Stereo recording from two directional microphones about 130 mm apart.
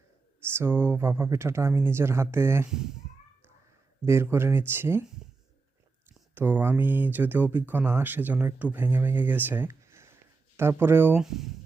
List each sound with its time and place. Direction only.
0.5 s speech: 15° right (ahead or behind)
4.0 s speech: 20° right (ahead or behind)
6.3 s speech: 15° right (ahead or behind)
11.2 s speech: 5° right (ahead or behind)